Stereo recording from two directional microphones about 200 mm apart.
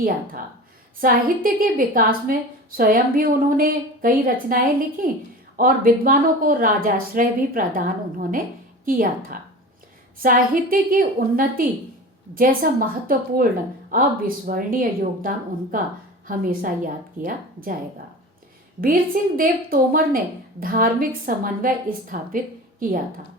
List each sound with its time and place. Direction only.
1.0 s a woman's voice: 45° right (ahead or behind)